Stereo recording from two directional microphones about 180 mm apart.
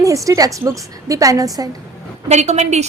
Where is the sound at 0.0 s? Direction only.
20° right (ahead or behind).